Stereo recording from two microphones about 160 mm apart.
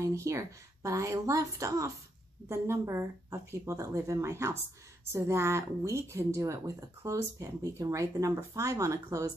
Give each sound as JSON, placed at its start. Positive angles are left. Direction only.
{"t": 0.0, "sound": "speech", "side_deg": -20}